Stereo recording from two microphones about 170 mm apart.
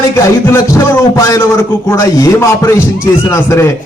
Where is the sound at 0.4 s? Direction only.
15° left (ahead or behind).